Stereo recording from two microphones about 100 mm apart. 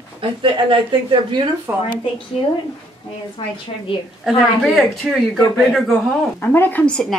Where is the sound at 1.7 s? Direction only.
25° right (ahead or behind).